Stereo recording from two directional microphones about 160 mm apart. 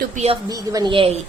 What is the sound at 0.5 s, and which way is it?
Speech, 25° right (ahead or behind).